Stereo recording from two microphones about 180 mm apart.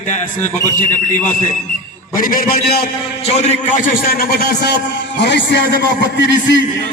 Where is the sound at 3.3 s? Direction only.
45° left (ahead or behind); by 6.6 s 75° left (ahead or behind).